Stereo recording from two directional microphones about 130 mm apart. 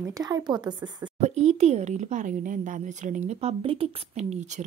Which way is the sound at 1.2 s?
60° right (ahead or behind).